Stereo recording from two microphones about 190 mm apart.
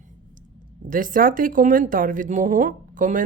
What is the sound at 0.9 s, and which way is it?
Speech, 45° right (ahead or behind).